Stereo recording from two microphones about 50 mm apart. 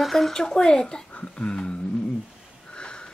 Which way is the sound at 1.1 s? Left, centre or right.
Left.